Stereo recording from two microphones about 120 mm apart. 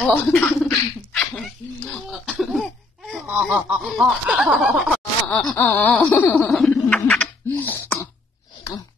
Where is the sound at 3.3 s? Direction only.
10° right (ahead or behind).